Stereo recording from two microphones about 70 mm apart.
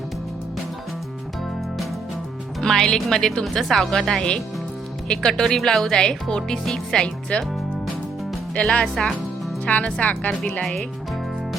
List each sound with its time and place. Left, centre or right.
2.6 s speech: centre
8.5 s speech: centre